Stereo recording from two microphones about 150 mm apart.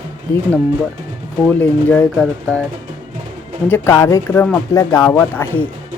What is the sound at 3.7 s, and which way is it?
Speech, 20° left (ahead or behind).